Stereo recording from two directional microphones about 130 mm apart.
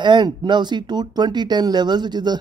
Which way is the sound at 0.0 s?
35° right (ahead or behind).